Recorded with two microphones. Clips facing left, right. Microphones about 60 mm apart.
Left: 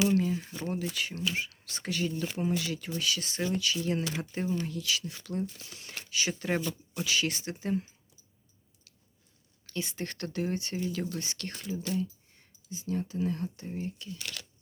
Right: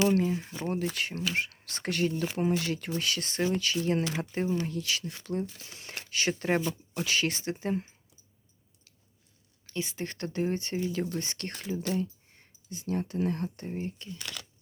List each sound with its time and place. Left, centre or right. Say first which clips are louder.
0.2 s speech: right 1 dB; right
0.6 s speech: right 4 dB; right
6.0 s speech: right 3 dB; right
9.6 s speech: right 1 dB; right
10.8 s speech: right 2 dB; right
11.3 s speech: right 2 dB; right
13.7 s speech: right 1 dB; right